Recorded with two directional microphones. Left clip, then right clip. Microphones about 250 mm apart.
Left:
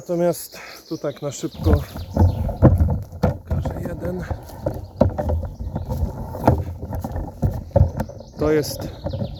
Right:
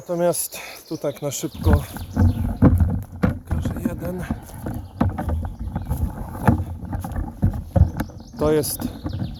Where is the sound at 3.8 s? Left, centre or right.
Centre.